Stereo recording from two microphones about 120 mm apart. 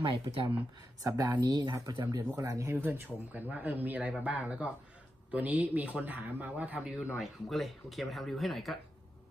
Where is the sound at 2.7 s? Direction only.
15° right (ahead or behind).